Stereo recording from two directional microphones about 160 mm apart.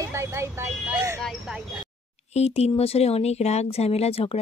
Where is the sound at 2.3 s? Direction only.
40° left (ahead or behind).